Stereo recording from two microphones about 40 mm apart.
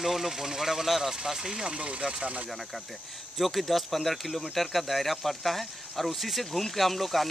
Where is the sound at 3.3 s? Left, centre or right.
Centre.